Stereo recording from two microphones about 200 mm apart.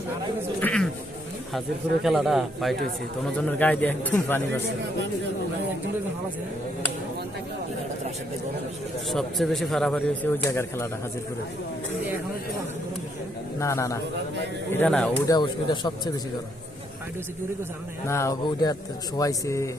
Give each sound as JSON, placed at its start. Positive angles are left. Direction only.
{"t": 0.6, "sound": "insect", "side_deg": 5}
{"t": 2.0, "sound": "speech", "side_deg": 0}
{"t": 9.0, "sound": "speech", "side_deg": 0}
{"t": 13.6, "sound": "speech", "side_deg": 15}
{"t": 15.3, "sound": "speech", "side_deg": 20}
{"t": 18.0, "sound": "speech", "side_deg": 15}